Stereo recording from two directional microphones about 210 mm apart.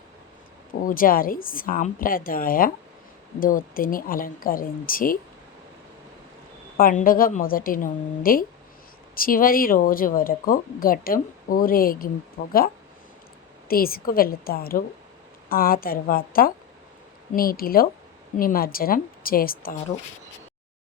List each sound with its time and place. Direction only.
0.7 s a woman's voice: 40° left (ahead or behind)
6.7 s speech: 40° left (ahead or behind)
13.7 s speech: 45° left (ahead or behind)